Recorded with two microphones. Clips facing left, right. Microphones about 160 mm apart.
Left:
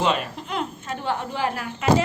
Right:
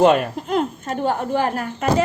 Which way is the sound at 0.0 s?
50° right (ahead or behind).